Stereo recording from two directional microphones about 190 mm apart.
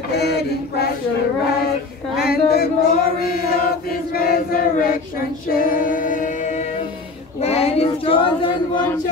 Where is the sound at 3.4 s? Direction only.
50° left (ahead or behind).